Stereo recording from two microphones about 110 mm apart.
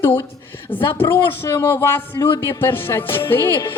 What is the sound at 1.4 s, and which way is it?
Speech, 20° left (ahead or behind).